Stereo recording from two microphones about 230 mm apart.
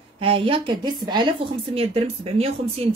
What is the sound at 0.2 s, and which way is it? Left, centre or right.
A woman's voice, right.